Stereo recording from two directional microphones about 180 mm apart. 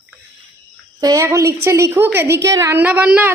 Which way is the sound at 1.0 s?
20° right (ahead or behind).